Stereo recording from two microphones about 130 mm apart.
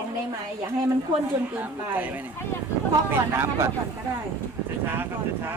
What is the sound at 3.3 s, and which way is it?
Speech, 20° right (ahead or behind).